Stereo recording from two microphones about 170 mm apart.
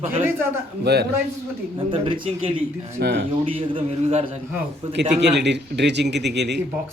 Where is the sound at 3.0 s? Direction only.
90° right.